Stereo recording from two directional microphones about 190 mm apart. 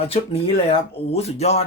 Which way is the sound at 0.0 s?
30° left (ahead or behind).